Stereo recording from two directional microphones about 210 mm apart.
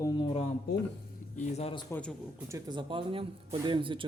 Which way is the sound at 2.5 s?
20° right (ahead or behind).